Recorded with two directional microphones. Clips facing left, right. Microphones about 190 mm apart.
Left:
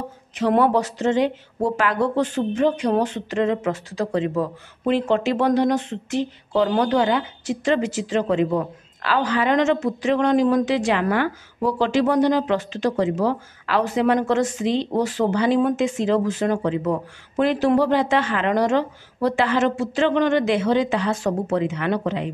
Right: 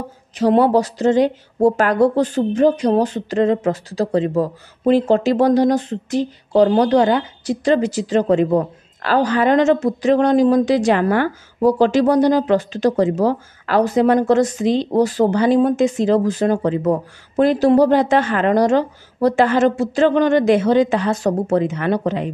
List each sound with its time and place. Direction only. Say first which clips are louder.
0.4 s speech: right 4 dB; 30° right (ahead or behind)